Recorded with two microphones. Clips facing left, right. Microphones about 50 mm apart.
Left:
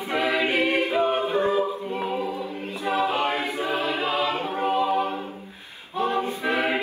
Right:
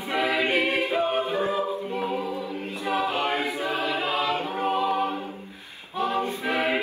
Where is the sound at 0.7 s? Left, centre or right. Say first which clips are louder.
Left 2 dB; left.